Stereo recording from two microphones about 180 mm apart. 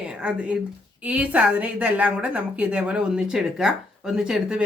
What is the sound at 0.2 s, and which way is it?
A woman's voice, 5° right (ahead or behind).